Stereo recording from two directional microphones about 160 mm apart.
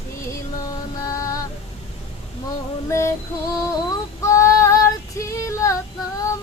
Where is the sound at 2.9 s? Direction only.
20° left (ahead or behind).